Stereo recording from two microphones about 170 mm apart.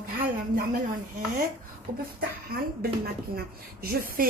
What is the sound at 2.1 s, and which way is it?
Speech, 65° right (ahead or behind).